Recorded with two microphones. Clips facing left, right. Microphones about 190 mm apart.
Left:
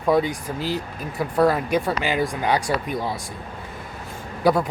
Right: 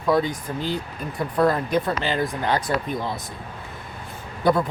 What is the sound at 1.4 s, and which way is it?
Speech, 10° left (ahead or behind).